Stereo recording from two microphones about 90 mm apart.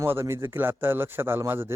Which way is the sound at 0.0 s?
25° right (ahead or behind).